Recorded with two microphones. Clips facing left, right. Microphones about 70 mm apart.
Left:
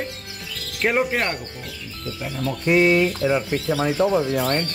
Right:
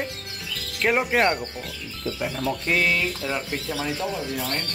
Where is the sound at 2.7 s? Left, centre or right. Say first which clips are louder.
Left 8 dB; left.